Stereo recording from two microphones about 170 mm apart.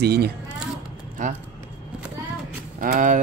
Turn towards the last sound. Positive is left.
turn(degrees=-55)  # may be behind; listen again after turning